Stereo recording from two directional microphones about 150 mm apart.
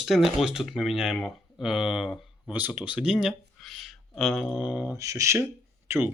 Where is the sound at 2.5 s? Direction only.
10° right (ahead or behind).